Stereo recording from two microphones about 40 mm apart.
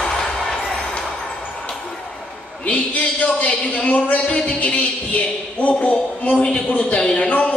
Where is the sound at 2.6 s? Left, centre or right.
Left.